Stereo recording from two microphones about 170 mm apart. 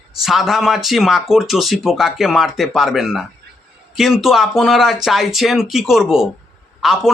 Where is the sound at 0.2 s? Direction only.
Centre (ahead or behind).